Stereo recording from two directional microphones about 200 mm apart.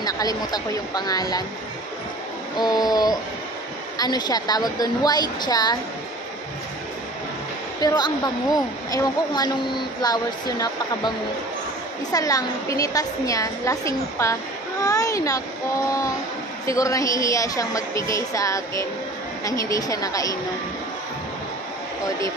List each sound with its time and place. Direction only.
0.0 s a woman's voice: 20° left (ahead or behind)
2.6 s a woman's voice: 20° left (ahead or behind)
7.8 s a woman's voice: 20° left (ahead or behind)
16.6 s a woman's voice: 15° left (ahead or behind)